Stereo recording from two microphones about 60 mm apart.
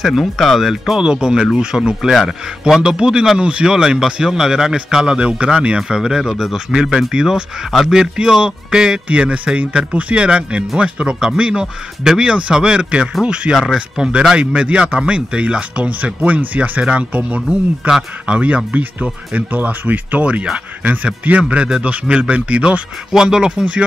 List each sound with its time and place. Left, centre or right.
0.0 s speech: centre